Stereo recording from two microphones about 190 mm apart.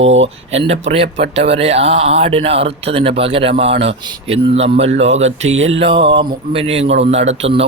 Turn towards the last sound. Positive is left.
turn(degrees=-35)  # may be behind; listen again after turning